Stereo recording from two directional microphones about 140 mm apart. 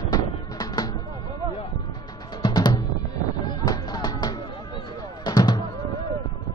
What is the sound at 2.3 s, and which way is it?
Drum, 30° left (ahead or behind).